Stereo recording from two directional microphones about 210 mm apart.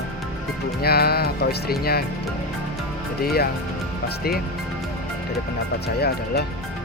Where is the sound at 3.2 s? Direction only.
45° left (ahead or behind).